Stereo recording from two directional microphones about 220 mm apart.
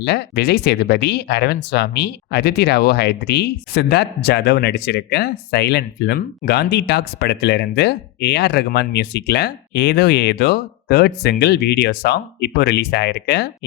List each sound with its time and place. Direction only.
0.0 s speech: 50° left (ahead or behind)